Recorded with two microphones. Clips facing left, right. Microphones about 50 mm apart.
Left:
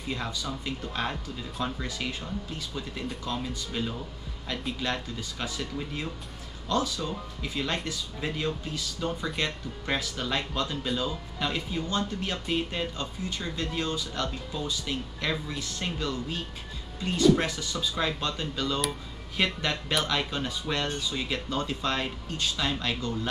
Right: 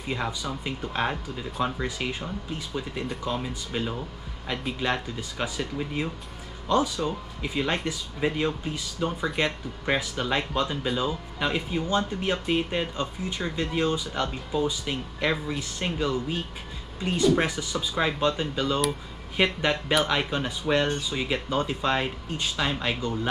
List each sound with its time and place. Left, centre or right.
0.0 s speech: centre